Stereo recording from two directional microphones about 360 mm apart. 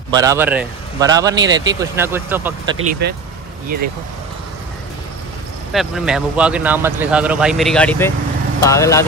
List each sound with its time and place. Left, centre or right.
0.1 s speech: centre
2.9 s speech: right
5.7 s speech: centre